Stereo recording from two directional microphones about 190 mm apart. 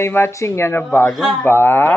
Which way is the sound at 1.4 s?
10° left (ahead or behind).